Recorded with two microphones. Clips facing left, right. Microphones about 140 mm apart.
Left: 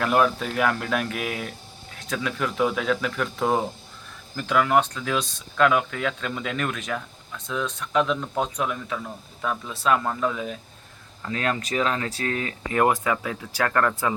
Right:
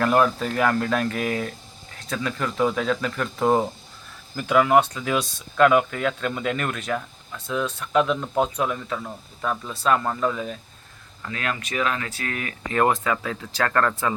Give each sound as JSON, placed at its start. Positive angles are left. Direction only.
{"t": 0.0, "sound": "speech", "side_deg": 0}
{"t": 11.3, "sound": "speech", "side_deg": 35}